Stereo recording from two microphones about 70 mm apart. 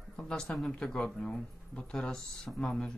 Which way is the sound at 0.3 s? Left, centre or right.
Centre.